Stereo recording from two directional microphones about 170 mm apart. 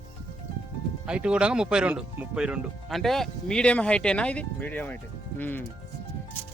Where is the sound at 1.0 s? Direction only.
5° right (ahead or behind).